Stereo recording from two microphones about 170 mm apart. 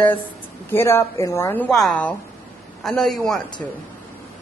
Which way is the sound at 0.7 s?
15° left (ahead or behind).